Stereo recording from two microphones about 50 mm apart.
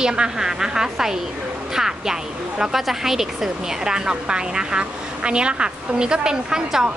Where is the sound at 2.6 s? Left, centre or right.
Centre.